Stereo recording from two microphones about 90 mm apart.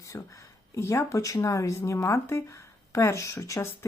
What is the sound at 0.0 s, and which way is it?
Speech, 35° left (ahead or behind).